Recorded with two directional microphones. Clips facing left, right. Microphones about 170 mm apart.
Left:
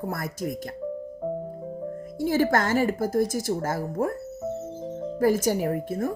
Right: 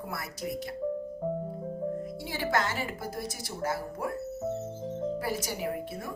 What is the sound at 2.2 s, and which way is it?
Speech, 45° left (ahead or behind).